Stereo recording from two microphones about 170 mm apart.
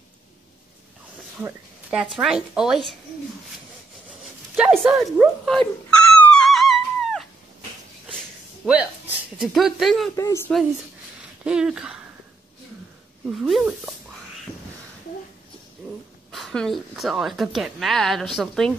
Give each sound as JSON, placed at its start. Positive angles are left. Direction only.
{"t": 1.4, "sound": "a woman's voice", "side_deg": -5}
{"t": 4.2, "sound": "a sound", "side_deg": -5}
{"t": 8.6, "sound": "a woman's voice", "side_deg": 0}
{"t": 10.1, "sound": "speech", "side_deg": 20}
{"t": 11.4, "sound": "a woman's voice", "side_deg": -5}
{"t": 13.3, "sound": "a woman's voice", "side_deg": 0}
{"t": 16.3, "sound": "a woman's voice", "side_deg": 0}